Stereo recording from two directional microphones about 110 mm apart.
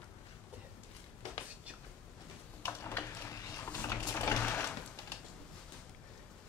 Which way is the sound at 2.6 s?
20° left (ahead or behind).